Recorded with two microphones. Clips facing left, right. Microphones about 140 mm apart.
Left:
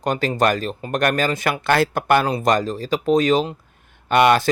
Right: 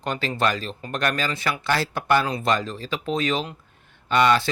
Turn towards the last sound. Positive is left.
turn(degrees=55)  # may be behind; listen again after turning